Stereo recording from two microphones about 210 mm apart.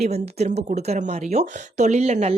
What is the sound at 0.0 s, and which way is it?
Speech, 30° right (ahead or behind).